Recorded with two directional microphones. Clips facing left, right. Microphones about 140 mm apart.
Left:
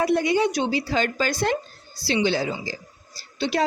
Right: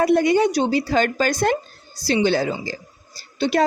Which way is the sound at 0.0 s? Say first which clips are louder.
Right 4 dB; 50° right (ahead or behind).